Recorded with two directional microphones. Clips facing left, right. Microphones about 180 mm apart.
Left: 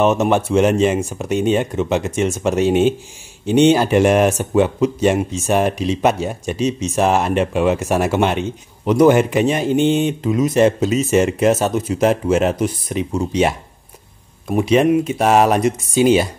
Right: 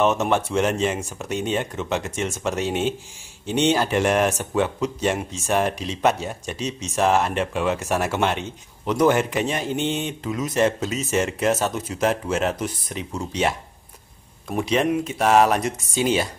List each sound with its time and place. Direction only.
0.0 s speech: 15° left (ahead or behind)
14.5 s speech: 10° left (ahead or behind)